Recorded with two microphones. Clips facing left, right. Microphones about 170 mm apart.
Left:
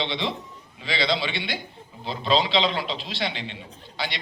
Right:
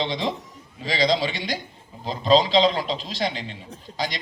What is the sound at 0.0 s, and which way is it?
A man's voice, 40° right (ahead or behind).